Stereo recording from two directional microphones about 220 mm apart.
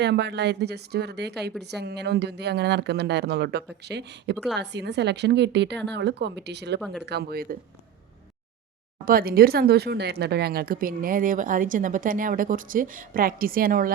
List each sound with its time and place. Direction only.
0.0 s speech: 50° right (ahead or behind)
9.0 s speech: 40° right (ahead or behind)